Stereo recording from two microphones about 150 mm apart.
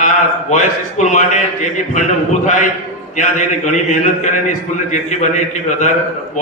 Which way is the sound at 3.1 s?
55° left (ahead or behind).